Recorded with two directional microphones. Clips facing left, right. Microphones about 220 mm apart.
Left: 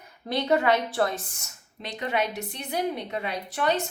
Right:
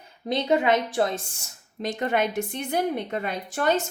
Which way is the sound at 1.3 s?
30° right (ahead or behind).